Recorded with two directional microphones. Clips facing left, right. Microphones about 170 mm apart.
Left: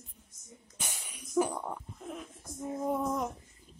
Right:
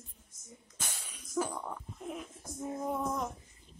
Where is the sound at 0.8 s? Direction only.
15° left (ahead or behind).